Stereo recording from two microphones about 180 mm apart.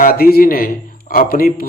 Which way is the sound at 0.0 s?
55° left (ahead or behind).